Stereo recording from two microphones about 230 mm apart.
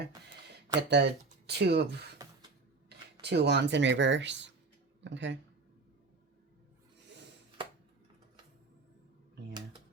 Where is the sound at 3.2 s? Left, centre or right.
Right.